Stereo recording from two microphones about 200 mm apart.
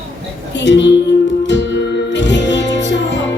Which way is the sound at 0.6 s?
60° left (ahead or behind).